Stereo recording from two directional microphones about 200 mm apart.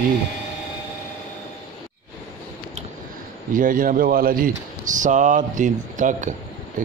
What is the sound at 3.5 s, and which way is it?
Speech, 40° right (ahead or behind).